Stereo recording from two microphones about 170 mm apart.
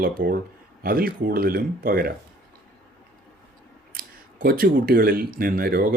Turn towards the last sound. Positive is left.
turn(degrees=-60)  # may be behind; listen again after turning